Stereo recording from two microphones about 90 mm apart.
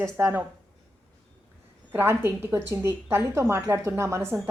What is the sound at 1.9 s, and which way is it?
A woman's voice, 25° right (ahead or behind).